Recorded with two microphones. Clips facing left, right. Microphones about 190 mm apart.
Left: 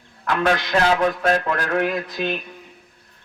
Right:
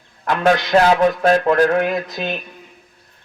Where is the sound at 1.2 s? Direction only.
30° right (ahead or behind).